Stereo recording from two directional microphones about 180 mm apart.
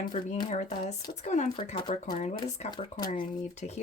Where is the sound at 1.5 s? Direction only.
30° left (ahead or behind).